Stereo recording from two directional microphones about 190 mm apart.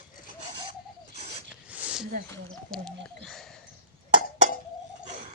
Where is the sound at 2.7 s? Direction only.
5° left (ahead or behind).